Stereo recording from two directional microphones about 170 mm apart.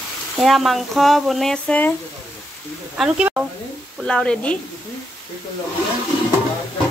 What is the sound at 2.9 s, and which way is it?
A man's voice, 5° right (ahead or behind).